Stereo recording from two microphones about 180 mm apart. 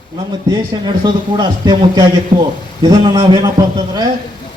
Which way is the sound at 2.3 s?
50° right (ahead or behind).